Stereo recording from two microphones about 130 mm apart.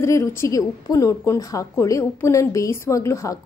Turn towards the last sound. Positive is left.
turn(degrees=25)  # may be behind; listen again after turning